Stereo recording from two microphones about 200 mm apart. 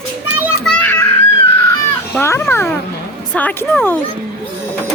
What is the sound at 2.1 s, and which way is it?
A woman's voice, 10° left (ahead or behind).